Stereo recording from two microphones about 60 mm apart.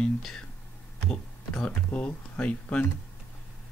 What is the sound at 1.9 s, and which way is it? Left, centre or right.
Speech, left.